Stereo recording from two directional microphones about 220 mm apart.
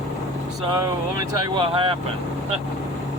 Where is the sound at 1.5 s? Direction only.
25° right (ahead or behind).